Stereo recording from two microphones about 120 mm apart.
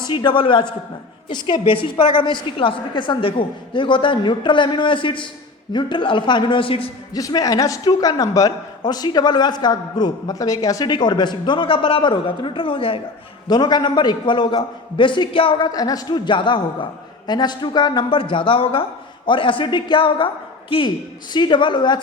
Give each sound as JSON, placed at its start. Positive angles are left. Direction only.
{"t": 0.1, "sound": "a woman's voice", "side_deg": 40}
{"t": 7.1, "sound": "a man's voice", "side_deg": 30}
{"t": 13.5, "sound": "a man's voice", "side_deg": 35}